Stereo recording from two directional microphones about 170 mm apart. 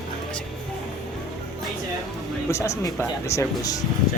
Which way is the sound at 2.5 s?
15° left (ahead or behind).